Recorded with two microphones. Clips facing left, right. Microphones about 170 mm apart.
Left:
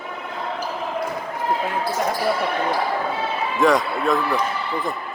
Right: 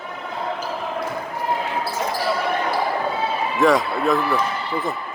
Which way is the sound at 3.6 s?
Centre (ahead or behind).